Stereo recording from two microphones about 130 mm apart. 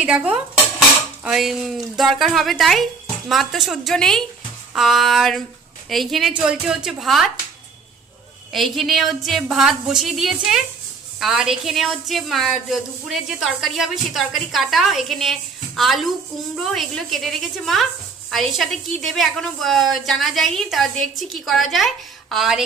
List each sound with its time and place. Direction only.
0.0 s dishes: 10° right (ahead or behind)
4.7 s a woman's voice: centre (ahead or behind)
8.5 s a woman's voice: centre (ahead or behind)